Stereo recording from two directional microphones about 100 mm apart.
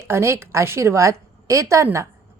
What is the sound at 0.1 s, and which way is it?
A woman's voice, 25° right (ahead or behind).